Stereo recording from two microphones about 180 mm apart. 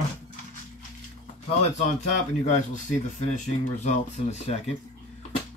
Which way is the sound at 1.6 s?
40° left (ahead or behind).